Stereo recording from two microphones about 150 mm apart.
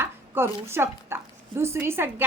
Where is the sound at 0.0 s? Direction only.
15° right (ahead or behind).